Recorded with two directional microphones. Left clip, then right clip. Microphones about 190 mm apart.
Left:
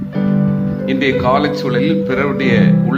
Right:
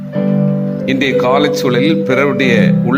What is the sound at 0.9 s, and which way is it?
Speech, 25° right (ahead or behind).